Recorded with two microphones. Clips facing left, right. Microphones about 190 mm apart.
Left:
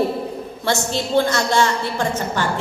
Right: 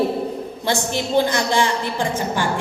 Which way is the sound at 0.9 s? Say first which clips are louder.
Even; 15° right (ahead or behind).